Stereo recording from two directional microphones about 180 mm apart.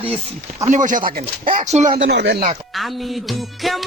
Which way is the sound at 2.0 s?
70° right (ahead or behind).